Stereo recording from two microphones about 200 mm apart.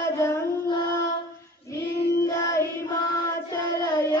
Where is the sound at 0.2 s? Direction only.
20° left (ahead or behind).